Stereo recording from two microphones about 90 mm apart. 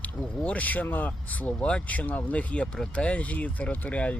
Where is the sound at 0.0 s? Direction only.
15° left (ahead or behind).